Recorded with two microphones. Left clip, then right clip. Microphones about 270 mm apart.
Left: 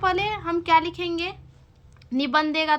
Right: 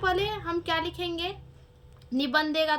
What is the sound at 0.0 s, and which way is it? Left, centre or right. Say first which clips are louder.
A child's voice: left 4 dB; centre.